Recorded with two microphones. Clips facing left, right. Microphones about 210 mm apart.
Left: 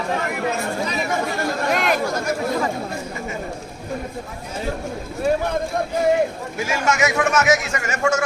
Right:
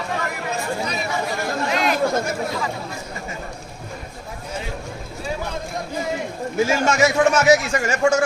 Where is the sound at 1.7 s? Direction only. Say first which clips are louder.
Left 1 dB; 50° left (ahead or behind).